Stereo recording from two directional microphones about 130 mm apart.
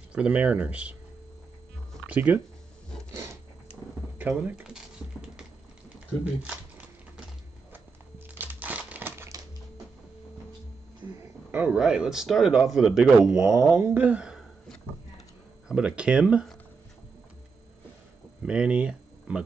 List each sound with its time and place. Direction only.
0.1 s speech: 10° right (ahead or behind)
2.0 s speech: 10° right (ahead or behind)
3.1 s a sound: 20° right (ahead or behind)
4.2 s speech: 10° right (ahead or behind)
6.4 s typewriter: 10° right (ahead or behind)
8.4 s crumpling: 10° right (ahead or behind)
11.1 s speech: 15° right (ahead or behind)
13.4 s speech: 20° right (ahead or behind)
15.7 s speech: 10° right (ahead or behind)
18.4 s speech: 5° right (ahead or behind)